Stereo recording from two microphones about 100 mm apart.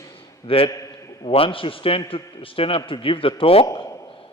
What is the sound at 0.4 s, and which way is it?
A man's voice, 70° left (ahead or behind).